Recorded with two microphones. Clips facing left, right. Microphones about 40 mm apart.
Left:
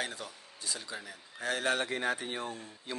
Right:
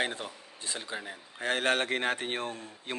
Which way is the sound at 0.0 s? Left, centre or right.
Right.